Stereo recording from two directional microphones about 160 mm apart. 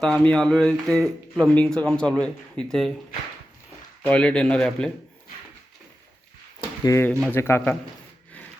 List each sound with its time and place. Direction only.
0.0 s speech: 5° left (ahead or behind)
4.0 s speech: 5° left (ahead or behind)
6.8 s speech: 20° left (ahead or behind)